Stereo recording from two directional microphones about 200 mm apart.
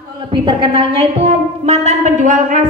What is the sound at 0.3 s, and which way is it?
A woman's voice, 25° right (ahead or behind).